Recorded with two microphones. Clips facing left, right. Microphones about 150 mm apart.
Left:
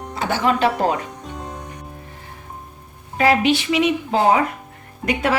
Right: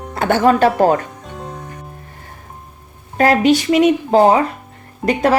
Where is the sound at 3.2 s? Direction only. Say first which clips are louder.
Right 4 dB; 45° right (ahead or behind).